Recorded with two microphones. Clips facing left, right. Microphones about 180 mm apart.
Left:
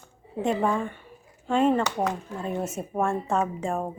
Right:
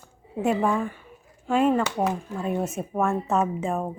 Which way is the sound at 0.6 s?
5° right (ahead or behind).